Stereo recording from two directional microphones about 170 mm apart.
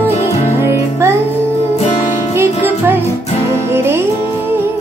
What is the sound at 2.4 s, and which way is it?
Music, 10° right (ahead or behind).